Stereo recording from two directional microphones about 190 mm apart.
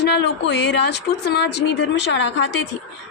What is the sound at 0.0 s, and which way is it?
Speech, 65° left (ahead or behind).